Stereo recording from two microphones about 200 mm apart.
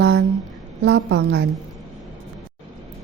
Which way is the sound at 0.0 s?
55° right (ahead or behind).